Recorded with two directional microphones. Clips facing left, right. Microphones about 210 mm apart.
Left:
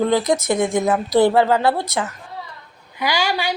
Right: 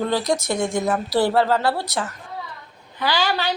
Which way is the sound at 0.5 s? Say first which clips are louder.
Left 4 dB; centre (ahead or behind).